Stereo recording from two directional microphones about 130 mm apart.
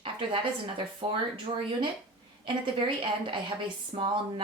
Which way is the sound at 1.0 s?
40° right (ahead or behind).